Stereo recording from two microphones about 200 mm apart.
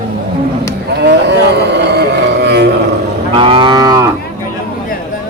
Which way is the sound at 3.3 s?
25° right (ahead or behind).